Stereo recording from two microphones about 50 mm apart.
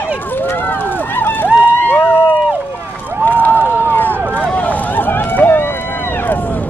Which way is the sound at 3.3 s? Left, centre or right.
Left.